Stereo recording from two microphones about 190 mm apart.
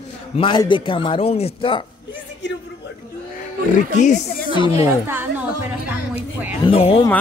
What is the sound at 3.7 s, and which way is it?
Speech, 40° left (ahead or behind).